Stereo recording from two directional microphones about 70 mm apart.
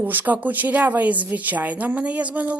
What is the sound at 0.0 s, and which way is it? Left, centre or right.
A woman's voice, right.